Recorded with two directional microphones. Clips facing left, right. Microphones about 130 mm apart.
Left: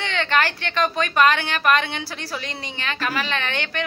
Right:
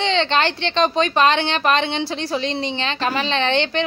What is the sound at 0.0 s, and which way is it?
A woman's voice, 25° right (ahead or behind).